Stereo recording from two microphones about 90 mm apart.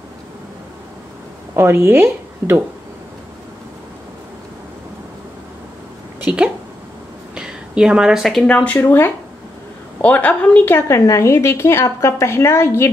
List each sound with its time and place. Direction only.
1.5 s a woman's voice: 30° right (ahead or behind)
6.2 s a woman's voice: 10° right (ahead or behind)
8.5 s a woman's voice: 10° left (ahead or behind)
8.7 s a woman's voice: 25° left (ahead or behind)